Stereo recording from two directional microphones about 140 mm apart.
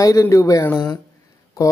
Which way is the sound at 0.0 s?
25° left (ahead or behind).